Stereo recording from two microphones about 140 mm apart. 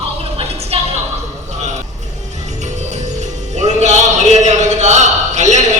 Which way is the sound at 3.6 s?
55° right (ahead or behind).